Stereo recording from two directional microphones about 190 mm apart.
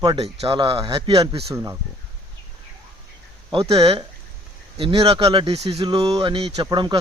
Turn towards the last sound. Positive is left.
turn(degrees=-20)  # may be behind; listen again after turning